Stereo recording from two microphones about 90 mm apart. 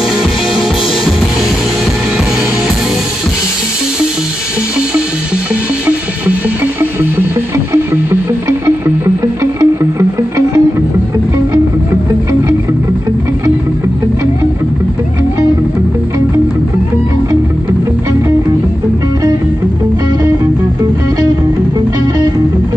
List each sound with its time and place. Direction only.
5.9 s music: 20° right (ahead or behind); by 10.6 s 40° right (ahead or behind)